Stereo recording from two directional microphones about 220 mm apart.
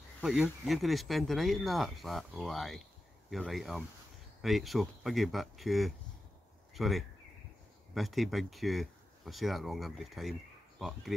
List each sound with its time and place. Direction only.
0.2 s speech: centre (ahead or behind)